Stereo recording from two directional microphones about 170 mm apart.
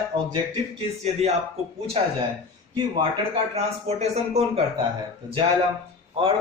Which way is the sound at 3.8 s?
40° right (ahead or behind).